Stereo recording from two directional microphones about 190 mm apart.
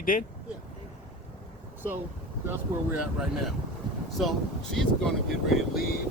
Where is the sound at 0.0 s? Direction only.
45° left (ahead or behind).